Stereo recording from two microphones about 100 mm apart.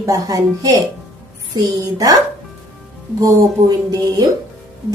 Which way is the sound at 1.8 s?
35° right (ahead or behind).